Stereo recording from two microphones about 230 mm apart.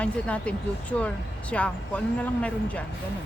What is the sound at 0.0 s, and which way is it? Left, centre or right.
Speech, centre.